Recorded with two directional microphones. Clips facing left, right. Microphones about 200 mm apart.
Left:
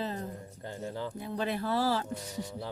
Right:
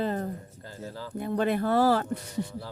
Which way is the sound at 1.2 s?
55° right (ahead or behind).